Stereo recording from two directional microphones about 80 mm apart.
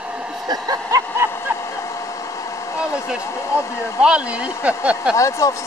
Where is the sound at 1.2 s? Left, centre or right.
Right.